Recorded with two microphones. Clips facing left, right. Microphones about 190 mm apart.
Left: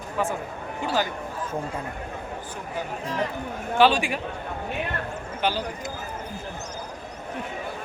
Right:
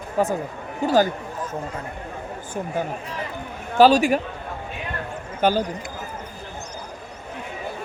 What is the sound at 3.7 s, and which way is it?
Speech, 40° right (ahead or behind).